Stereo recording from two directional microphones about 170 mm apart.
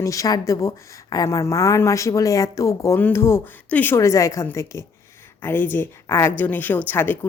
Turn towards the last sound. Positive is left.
turn(degrees=10)  # may be behind; listen again after turning